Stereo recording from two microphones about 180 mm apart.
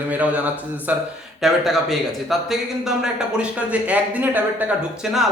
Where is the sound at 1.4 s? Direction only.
Centre (ahead or behind).